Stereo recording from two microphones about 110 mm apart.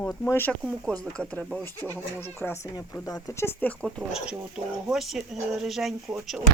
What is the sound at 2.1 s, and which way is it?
Speech, 20° left (ahead or behind).